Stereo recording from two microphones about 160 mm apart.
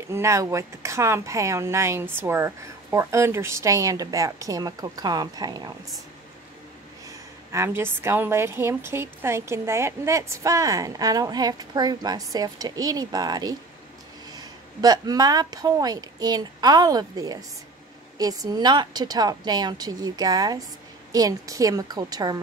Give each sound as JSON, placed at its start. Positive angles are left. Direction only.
{"t": 0.1, "sound": "a woman's voice", "side_deg": -20}
{"t": 7.1, "sound": "a woman's voice", "side_deg": -15}